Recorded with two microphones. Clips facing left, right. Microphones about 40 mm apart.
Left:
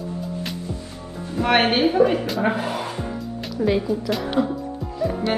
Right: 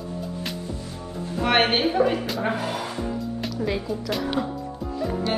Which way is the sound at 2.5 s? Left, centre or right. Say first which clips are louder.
Left 2 dB; left.